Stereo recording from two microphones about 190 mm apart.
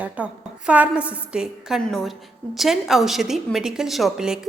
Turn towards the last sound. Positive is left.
turn(degrees=0)  # may be behind; listen again after turning